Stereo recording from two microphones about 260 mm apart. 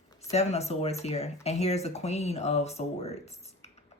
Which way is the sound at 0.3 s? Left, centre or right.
Left.